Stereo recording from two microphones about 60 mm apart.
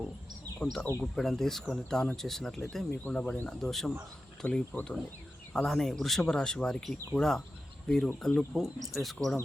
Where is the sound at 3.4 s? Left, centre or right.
Centre.